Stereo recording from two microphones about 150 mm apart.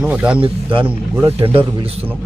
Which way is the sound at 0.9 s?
15° right (ahead or behind).